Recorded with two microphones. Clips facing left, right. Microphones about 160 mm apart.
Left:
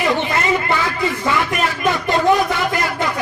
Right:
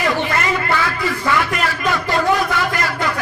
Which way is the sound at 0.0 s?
20° left (ahead or behind).